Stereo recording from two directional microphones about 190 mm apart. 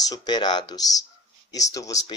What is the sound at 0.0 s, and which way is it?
Speech, 20° left (ahead or behind).